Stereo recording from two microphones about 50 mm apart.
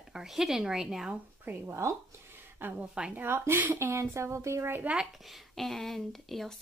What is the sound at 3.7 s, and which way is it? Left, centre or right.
Speech, right.